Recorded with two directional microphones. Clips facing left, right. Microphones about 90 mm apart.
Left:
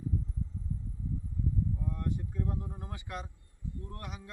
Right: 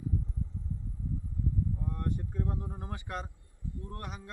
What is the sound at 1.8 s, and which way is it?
Vehicle, 40° right (ahead or behind).